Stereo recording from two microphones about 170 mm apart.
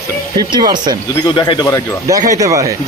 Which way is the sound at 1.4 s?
30° left (ahead or behind).